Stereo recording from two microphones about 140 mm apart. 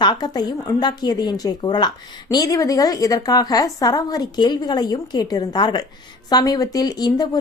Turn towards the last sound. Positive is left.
turn(degrees=30)  # may be behind; listen again after turning